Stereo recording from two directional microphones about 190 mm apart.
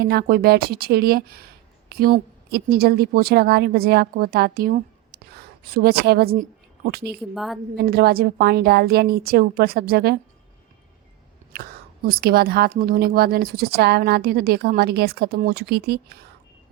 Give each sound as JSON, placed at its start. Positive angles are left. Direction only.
{"t": 0.0, "sound": "a woman's voice", "side_deg": -55}
{"t": 7.2, "sound": "a woman's voice", "side_deg": 0}
{"t": 7.8, "sound": "a woman's voice", "side_deg": -55}
{"t": 11.5, "sound": "a woman's voice", "side_deg": -50}